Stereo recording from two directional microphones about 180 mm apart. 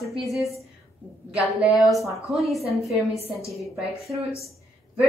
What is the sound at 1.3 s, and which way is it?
A woman's voice, 5° right (ahead or behind).